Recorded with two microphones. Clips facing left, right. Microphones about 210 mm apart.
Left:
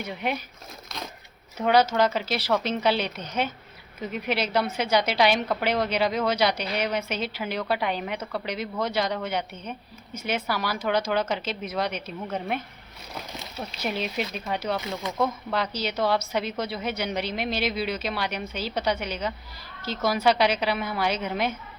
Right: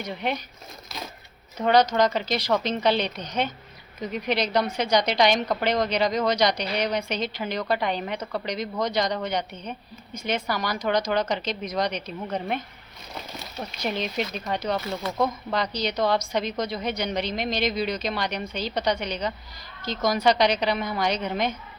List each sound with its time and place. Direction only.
0.0 s speech: 5° left (ahead or behind)
1.5 s a woman's voice: 5° left (ahead or behind)